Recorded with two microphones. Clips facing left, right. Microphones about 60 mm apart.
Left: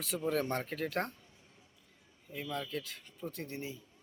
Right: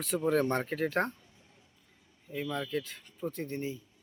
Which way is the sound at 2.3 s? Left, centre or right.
Centre.